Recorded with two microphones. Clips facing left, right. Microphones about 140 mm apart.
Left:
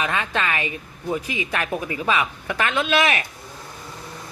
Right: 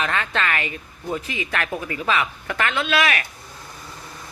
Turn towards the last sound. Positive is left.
turn(degrees=20)  # may be behind; listen again after turning